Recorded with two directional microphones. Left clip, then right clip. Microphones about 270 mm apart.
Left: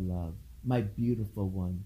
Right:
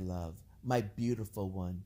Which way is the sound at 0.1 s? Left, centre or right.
Right.